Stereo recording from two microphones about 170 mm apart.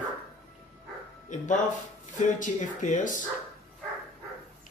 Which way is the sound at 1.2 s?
45° left (ahead or behind).